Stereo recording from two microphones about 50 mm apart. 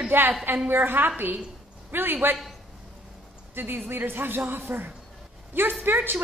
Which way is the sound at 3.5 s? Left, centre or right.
Right.